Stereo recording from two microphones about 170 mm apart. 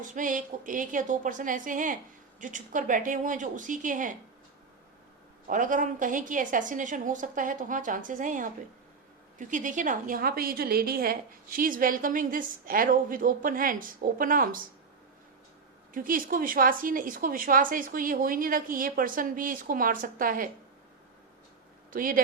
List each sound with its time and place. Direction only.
0.1 s a woman's voice: 50° right (ahead or behind)
5.5 s a woman's voice: 50° right (ahead or behind)
15.9 s a woman's voice: 55° right (ahead or behind)
21.9 s a woman's voice: 55° right (ahead or behind)